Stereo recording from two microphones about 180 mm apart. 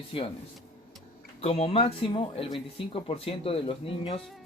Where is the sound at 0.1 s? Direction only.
30° left (ahead or behind).